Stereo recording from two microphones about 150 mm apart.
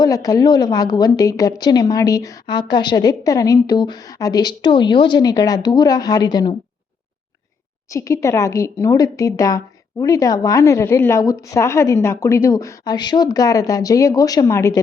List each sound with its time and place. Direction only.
0.0 s speech: 25° left (ahead or behind)
7.9 s speech: 20° left (ahead or behind)